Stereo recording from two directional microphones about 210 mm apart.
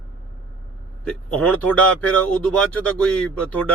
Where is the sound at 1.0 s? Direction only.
5° left (ahead or behind).